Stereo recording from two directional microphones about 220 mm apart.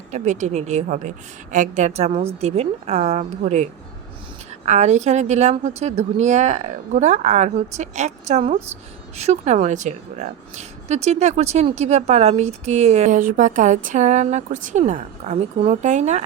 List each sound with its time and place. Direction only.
0.1 s a woman's voice: 35° right (ahead or behind)